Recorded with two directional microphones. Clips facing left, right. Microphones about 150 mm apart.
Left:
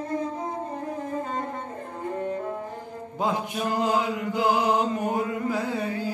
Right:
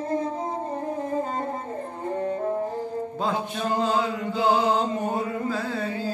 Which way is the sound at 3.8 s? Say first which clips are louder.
Even; 15° left (ahead or behind).